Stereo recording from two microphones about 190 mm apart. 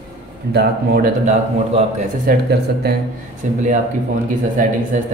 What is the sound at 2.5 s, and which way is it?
Speech, 60° right (ahead or behind).